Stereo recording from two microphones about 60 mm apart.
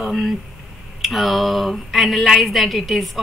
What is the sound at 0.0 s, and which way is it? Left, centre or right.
Speech, centre.